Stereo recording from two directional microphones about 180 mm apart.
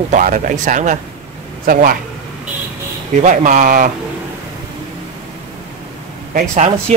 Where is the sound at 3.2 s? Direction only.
45° right (ahead or behind).